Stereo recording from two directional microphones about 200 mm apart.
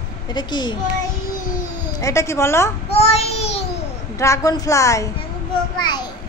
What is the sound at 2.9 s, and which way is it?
Child singing, 30° left (ahead or behind).